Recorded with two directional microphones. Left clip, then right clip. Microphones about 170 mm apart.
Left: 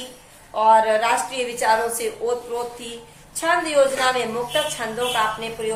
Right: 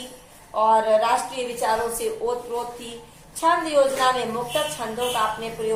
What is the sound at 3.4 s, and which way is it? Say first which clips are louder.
Speech: left 1 dB; 15° left (ahead or behind).